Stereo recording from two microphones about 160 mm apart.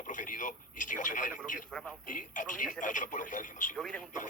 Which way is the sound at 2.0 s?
55° left (ahead or behind).